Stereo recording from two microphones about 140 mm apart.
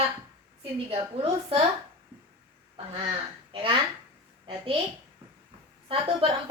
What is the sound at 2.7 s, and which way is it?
A woman's voice, 45° right (ahead or behind).